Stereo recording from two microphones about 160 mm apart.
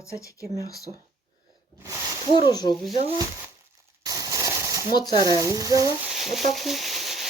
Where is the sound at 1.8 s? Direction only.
20° right (ahead or behind).